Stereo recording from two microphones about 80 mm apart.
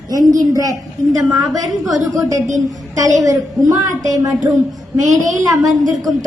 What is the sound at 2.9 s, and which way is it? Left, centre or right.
A woman's voice, right.